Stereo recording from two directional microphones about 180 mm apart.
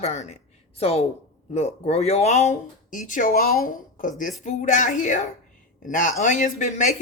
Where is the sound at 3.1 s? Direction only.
50° left (ahead or behind).